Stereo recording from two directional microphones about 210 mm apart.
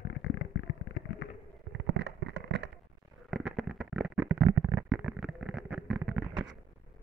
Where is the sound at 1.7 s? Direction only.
55° right (ahead or behind).